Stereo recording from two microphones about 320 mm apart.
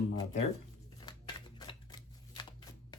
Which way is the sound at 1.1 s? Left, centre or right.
Centre.